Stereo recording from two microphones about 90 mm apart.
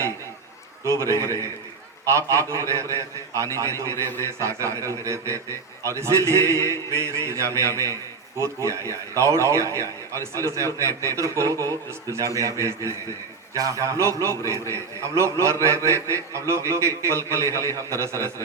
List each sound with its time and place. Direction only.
0.9 s a man's voice: 35° right (ahead or behind)
4.0 s a man's voice: 25° left (ahead or behind)
4.4 s a man's voice: 35° right (ahead or behind)